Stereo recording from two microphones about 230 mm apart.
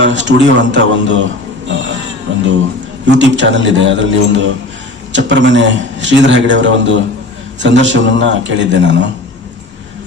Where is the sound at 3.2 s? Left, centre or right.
Right.